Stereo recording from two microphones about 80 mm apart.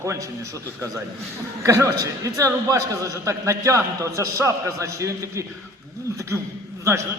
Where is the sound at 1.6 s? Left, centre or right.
Right.